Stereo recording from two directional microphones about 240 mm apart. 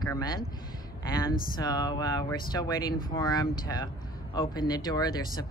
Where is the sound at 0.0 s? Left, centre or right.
Centre.